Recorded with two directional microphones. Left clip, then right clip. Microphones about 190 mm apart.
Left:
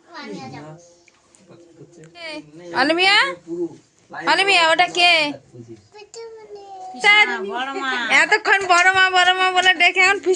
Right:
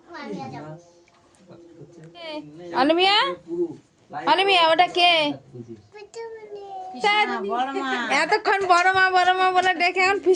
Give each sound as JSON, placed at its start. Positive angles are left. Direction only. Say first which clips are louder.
{"t": 2.1, "sound": "a man's voice", "louder": "left 2 dB", "side_deg": -10}
{"t": 7.0, "sound": "a woman's voice", "louder": "left 7 dB", "side_deg": -5}
{"t": 7.5, "sound": "speech", "louder": "left 1 dB", "side_deg": -60}
{"t": 8.0, "sound": "a man's voice", "louder": "left 6 dB", "side_deg": -5}